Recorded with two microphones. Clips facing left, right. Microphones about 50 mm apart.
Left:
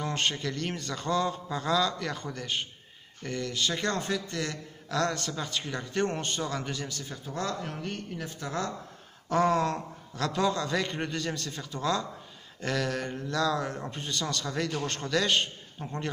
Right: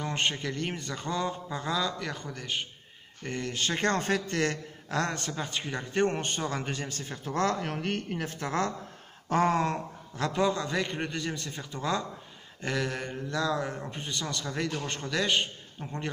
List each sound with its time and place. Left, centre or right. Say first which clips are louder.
0.0 s a man's voice: even; centre
3.3 s a man's voice: left 1 dB; right
4.8 s a man's voice: left 1 dB; right
9.3 s a man's voice: even; right; by 16.1 s centre